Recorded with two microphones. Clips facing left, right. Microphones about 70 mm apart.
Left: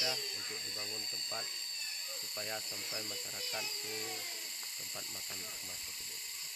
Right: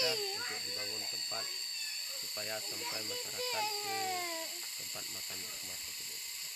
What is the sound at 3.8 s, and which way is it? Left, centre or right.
Music, right.